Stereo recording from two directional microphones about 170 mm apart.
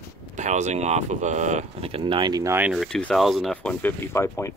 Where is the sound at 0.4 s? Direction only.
45° right (ahead or behind); by 2.7 s 15° right (ahead or behind).